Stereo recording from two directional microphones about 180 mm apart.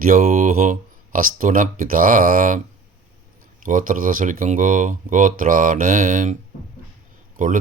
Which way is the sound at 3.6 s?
50° right (ahead or behind).